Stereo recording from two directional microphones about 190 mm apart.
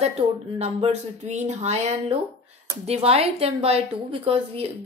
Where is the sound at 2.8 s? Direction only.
35° right (ahead or behind).